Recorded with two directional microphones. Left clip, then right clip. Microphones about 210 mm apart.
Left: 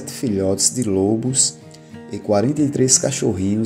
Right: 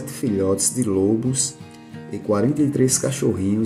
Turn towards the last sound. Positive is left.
turn(degrees=15)  # may be behind; listen again after turning